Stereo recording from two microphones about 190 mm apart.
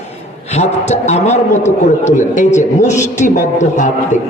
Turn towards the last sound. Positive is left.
turn(degrees=40)  # may be behind; listen again after turning